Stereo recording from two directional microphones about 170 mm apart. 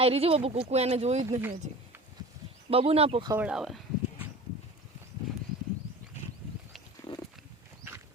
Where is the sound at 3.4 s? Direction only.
Centre (ahead or behind).